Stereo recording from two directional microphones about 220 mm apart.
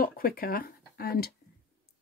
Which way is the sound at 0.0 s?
40° left (ahead or behind).